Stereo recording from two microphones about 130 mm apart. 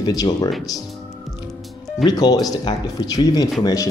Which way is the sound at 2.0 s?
30° left (ahead or behind).